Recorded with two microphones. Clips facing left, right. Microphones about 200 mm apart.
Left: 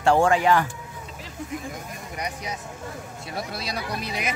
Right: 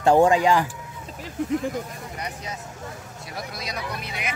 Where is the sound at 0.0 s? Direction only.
20° right (ahead or behind).